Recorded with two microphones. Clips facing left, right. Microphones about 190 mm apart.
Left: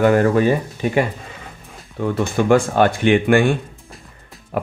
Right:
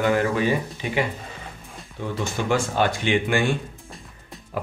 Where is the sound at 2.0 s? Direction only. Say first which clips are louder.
Left 8 dB; 55° left (ahead or behind).